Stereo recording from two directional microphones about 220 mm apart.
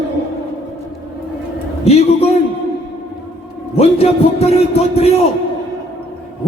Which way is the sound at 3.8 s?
30° left (ahead or behind).